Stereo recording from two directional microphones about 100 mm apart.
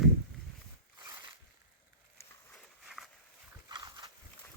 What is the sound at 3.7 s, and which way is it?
Horse, 45° right (ahead or behind).